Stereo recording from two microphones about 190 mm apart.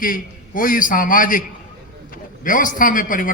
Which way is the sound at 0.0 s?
45° left (ahead or behind).